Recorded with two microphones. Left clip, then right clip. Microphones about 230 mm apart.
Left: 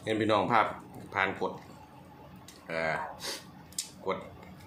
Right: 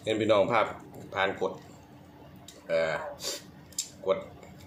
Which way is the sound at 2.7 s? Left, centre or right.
Centre.